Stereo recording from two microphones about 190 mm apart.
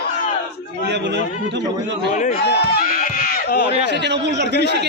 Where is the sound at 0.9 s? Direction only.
65° right (ahead or behind).